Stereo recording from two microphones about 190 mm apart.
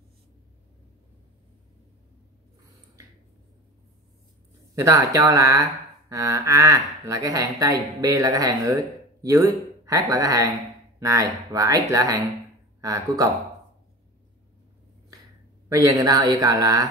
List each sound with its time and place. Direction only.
4.7 s speech: 15° right (ahead or behind)
15.7 s speech: 15° right (ahead or behind)